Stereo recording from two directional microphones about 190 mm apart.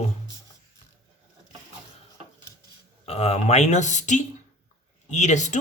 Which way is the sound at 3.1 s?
35° left (ahead or behind).